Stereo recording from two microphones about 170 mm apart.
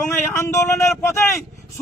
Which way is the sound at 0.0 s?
15° left (ahead or behind).